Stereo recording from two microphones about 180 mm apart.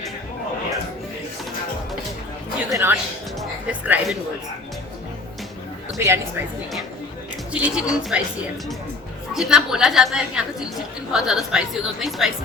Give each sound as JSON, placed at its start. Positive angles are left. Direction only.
{"t": 2.6, "sound": "a woman's voice", "side_deg": -15}
{"t": 6.0, "sound": "a woman's voice", "side_deg": -15}
{"t": 7.5, "sound": "a woman's voice", "side_deg": -5}
{"t": 9.3, "sound": "a woman's voice", "side_deg": -5}